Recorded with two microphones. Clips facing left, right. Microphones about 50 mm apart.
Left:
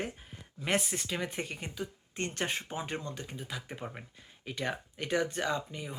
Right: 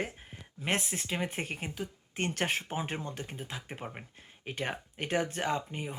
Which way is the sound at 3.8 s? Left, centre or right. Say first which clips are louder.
Even; centre.